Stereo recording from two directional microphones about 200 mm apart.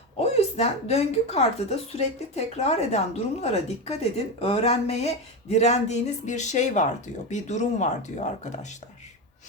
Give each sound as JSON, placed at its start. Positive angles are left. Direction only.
{"t": 0.2, "sound": "speech", "side_deg": 30}